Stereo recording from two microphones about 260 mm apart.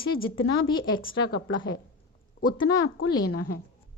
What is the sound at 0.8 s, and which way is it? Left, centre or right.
Speech, left.